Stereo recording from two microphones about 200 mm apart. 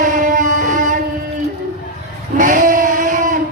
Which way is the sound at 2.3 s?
40° right (ahead or behind).